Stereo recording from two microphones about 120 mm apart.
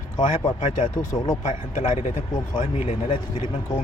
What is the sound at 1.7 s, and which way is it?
Speech, 65° left (ahead or behind).